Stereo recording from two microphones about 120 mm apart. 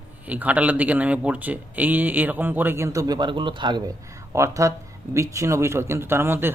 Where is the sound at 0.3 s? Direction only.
10° right (ahead or behind); by 3.9 s 35° right (ahead or behind).